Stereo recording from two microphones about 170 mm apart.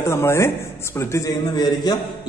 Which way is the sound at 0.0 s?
15° left (ahead or behind).